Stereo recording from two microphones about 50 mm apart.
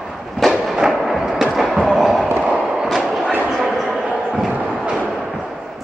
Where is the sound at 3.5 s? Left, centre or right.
Centre.